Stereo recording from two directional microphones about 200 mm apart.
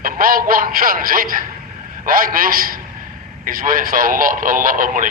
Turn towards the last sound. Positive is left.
turn(degrees=-45)  # may be behind; listen again after turning